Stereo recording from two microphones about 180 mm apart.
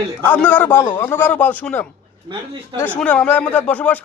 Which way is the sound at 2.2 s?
25° right (ahead or behind).